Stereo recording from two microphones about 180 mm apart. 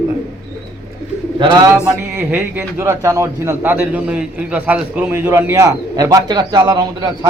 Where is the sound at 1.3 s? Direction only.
30° right (ahead or behind).